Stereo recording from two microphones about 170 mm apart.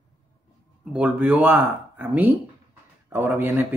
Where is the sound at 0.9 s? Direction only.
10° right (ahead or behind).